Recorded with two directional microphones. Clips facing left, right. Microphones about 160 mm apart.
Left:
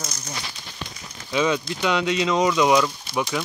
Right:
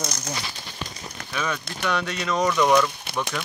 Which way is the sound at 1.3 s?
20° left (ahead or behind).